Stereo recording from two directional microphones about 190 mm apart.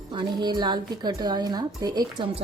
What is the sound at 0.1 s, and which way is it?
A woman's voice, 25° right (ahead or behind).